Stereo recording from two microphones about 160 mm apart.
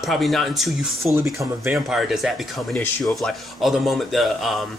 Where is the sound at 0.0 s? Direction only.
Centre (ahead or behind).